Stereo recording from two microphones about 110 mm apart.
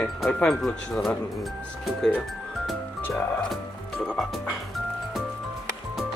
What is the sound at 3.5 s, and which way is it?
Music, 5° left (ahead or behind).